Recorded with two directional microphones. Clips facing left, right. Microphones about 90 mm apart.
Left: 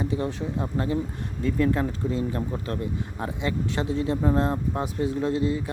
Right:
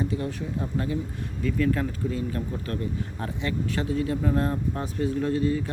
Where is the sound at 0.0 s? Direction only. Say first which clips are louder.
Left 2 dB; 25° left (ahead or behind).